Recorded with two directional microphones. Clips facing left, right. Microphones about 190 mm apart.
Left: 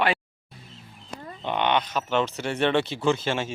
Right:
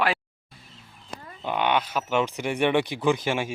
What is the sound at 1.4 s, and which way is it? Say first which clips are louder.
Speech: even; 5° right (ahead or behind).